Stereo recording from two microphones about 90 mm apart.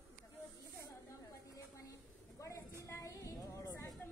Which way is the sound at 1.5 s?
40° left (ahead or behind).